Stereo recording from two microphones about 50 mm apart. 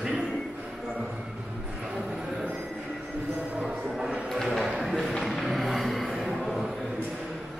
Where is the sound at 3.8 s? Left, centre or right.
Centre.